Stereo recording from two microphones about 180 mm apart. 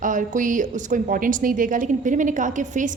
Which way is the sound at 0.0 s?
45° right (ahead or behind).